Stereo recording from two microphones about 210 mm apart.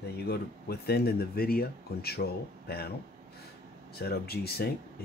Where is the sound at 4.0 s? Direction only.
50° left (ahead or behind).